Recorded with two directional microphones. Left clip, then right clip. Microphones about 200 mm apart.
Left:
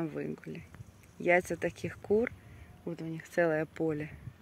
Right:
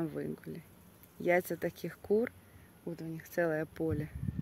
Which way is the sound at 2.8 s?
15° left (ahead or behind).